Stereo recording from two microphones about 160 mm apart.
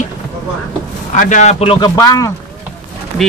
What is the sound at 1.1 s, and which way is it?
Speech, 50° left (ahead or behind).